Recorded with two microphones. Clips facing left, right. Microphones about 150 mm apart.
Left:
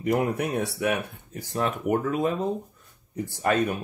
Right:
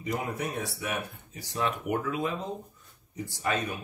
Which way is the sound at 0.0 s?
60° left (ahead or behind).